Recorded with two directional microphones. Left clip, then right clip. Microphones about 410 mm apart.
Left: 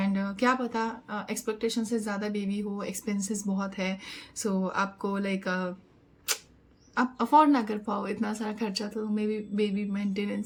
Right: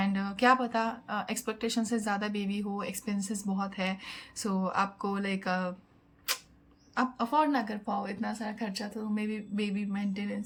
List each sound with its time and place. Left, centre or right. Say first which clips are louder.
0.0 s speech: even; centre
6.9 s speech: left 6 dB; centre